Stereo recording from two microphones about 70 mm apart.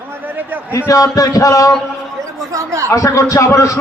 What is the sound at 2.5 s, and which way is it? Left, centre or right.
Speech, right.